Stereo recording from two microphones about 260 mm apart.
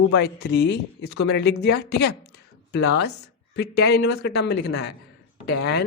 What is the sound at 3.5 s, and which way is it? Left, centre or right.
Speech, left.